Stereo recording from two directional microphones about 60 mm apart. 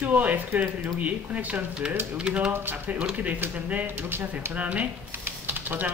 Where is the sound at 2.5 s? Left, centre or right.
Right.